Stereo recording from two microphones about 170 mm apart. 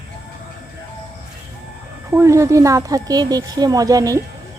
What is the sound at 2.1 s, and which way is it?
Speech, 15° right (ahead or behind).